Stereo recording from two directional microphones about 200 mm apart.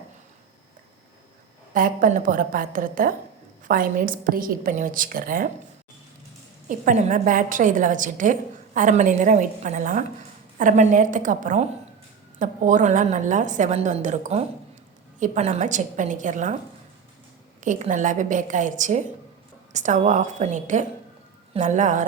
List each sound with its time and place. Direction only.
1.7 s a woman's voice: 45° right (ahead or behind)
6.7 s a woman's voice: 40° right (ahead or behind)
17.6 s a woman's voice: 40° right (ahead or behind)